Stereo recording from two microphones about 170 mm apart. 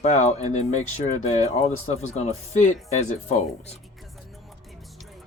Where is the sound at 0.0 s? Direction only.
40° left (ahead or behind).